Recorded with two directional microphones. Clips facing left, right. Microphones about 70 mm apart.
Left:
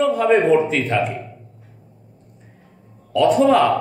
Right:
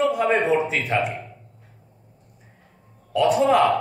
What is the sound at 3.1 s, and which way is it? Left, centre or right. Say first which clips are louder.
Speech: left 3 dB; centre.